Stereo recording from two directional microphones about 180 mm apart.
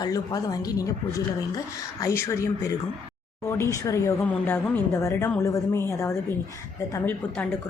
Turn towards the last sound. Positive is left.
turn(degrees=10)  # may be behind; listen again after turning